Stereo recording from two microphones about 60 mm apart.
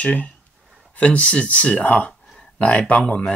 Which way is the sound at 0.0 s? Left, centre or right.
Left.